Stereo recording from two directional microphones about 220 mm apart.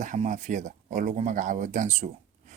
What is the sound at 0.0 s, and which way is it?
Speech, 35° right (ahead or behind).